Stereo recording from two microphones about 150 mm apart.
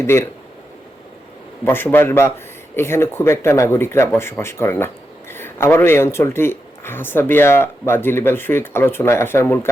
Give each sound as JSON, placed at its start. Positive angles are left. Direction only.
{"t": 0.0, "sound": "speech", "side_deg": 15}
{"t": 1.6, "sound": "speech", "side_deg": 15}